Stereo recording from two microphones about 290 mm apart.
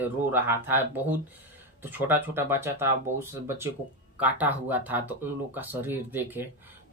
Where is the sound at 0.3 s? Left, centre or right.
Centre.